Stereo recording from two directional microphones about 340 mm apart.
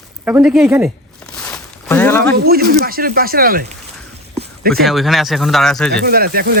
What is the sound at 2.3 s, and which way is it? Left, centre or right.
Speech, right.